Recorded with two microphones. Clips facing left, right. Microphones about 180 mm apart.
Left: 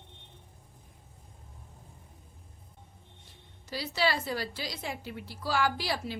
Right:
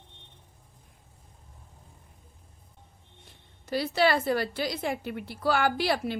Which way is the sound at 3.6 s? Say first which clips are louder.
Right 6 dB; 55° right (ahead or behind).